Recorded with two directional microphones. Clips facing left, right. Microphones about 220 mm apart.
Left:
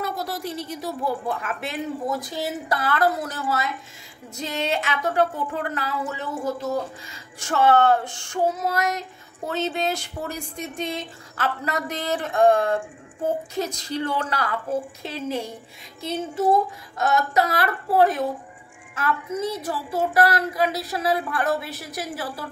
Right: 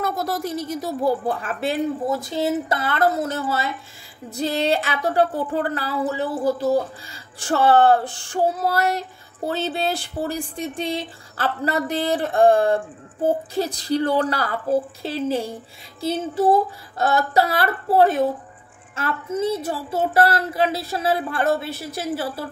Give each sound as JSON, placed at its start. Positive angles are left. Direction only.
{"t": 0.0, "sound": "a woman's voice", "side_deg": -45}
{"t": 4.4, "sound": "female singing", "side_deg": -35}
{"t": 17.0, "sound": "a woman's voice", "side_deg": -30}